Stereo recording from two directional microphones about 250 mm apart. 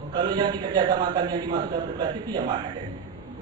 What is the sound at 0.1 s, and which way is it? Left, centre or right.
A man's voice, centre.